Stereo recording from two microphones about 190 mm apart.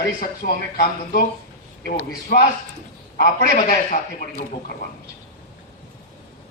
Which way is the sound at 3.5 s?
45° left (ahead or behind).